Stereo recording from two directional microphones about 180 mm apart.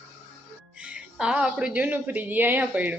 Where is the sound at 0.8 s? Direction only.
5° right (ahead or behind).